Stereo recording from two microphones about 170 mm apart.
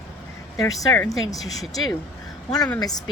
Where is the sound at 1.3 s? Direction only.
Centre (ahead or behind).